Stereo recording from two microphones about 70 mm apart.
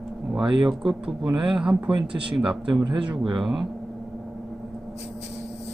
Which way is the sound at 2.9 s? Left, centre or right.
Right.